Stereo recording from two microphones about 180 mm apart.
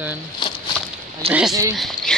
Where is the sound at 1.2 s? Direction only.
35° right (ahead or behind).